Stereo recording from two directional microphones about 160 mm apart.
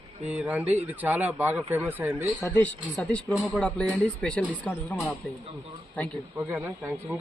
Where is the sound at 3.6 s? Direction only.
10° left (ahead or behind).